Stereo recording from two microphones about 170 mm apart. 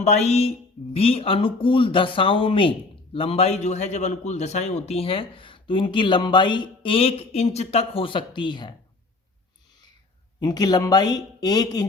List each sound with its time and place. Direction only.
0.0 s speech: 40° left (ahead or behind)
10.4 s speech: 25° left (ahead or behind)